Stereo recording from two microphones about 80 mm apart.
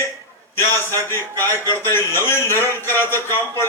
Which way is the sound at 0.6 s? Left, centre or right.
Left.